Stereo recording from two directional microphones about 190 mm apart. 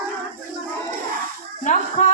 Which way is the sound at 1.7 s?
40° left (ahead or behind).